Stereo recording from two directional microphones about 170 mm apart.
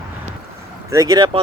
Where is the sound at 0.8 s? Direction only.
20° right (ahead or behind).